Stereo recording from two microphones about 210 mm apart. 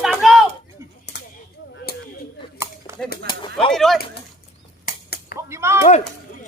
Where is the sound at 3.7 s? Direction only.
Centre (ahead or behind).